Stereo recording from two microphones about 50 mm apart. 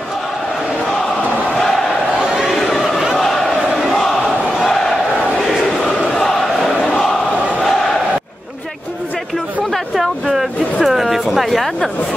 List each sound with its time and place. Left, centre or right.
2.3 s chatter: centre
3.2 s battle cry: centre
5.9 s a sound: left
6.1 s crowd: centre
6.9 s crowd: centre
10.2 s a sound: centre